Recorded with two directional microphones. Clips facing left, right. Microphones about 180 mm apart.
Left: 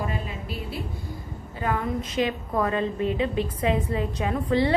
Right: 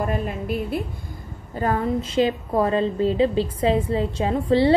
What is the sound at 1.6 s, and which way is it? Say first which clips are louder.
A woman's voice: right 5 dB; 35° right (ahead or behind).